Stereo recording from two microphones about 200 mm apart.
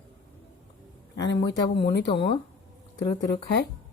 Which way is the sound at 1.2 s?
20° left (ahead or behind).